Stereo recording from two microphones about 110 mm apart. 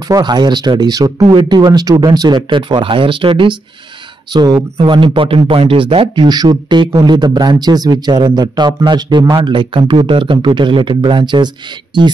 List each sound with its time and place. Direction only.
0.1 s a man's voice: 40° right (ahead or behind)
6.2 s a man's voice: 40° right (ahead or behind)